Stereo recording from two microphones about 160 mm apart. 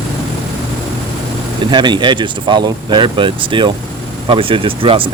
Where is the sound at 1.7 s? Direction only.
30° right (ahead or behind).